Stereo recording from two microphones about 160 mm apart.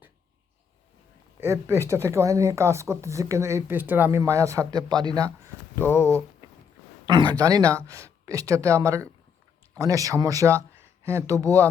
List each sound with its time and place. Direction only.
1.4 s speech: 15° right (ahead or behind)
5.9 s speech: 10° left (ahead or behind)
7.0 s speech: 25° right (ahead or behind)